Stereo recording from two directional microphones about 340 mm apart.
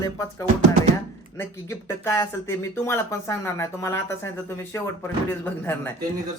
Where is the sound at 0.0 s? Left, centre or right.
Centre.